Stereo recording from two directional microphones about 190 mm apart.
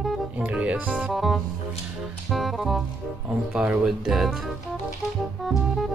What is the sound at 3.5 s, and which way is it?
Speech, 5° right (ahead or behind).